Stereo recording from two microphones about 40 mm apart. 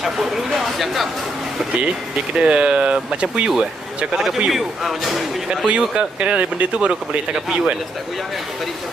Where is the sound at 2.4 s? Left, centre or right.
Right.